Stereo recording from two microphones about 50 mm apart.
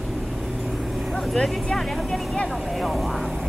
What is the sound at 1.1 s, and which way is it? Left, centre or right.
Vehicle, centre.